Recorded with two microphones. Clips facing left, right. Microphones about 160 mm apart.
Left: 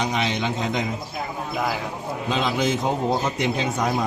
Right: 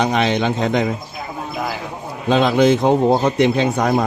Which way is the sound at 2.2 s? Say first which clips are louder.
Right 10 dB; 70° right (ahead or behind).